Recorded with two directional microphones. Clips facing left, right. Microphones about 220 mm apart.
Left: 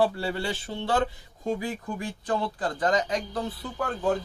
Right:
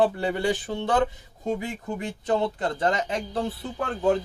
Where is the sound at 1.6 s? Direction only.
25° right (ahead or behind).